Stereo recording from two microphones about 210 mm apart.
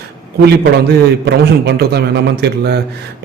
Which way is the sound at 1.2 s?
50° right (ahead or behind).